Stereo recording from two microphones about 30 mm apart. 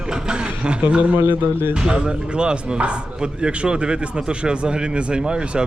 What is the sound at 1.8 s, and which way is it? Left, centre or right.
Speech, right.